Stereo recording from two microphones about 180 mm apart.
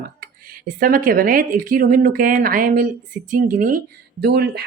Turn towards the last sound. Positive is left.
turn(degrees=-60)  # may be behind; listen again after turning